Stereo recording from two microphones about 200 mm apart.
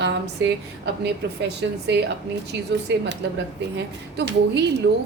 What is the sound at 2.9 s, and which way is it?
Speech, 60° right (ahead or behind).